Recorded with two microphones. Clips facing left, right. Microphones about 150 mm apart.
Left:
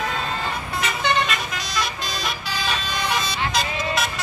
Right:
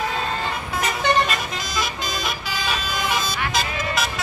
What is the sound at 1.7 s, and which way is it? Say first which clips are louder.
Vehicle: even; centre (ahead or behind).